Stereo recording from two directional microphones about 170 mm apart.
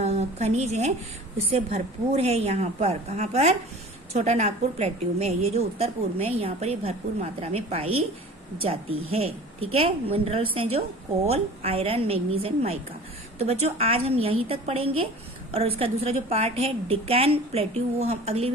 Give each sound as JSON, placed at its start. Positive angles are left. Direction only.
{"t": 0.0, "sound": "a woman's voice", "side_deg": -40}